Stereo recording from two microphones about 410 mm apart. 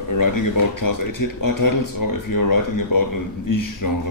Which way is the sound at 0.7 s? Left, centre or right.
Left.